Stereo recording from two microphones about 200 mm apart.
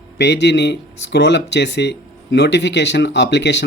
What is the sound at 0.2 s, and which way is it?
Speech, 60° left (ahead or behind).